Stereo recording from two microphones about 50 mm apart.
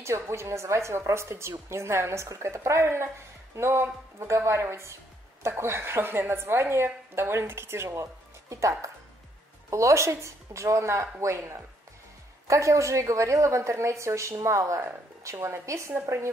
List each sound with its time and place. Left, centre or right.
0.0 s a woman's voice: right
12.4 s a woman's voice: right
15.3 s a woman's voice: right